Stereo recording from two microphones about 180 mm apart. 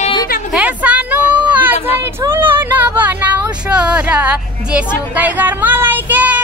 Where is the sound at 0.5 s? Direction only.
5° right (ahead or behind).